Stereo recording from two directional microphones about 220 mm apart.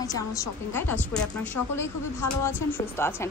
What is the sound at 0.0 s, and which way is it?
Speech, 15° left (ahead or behind).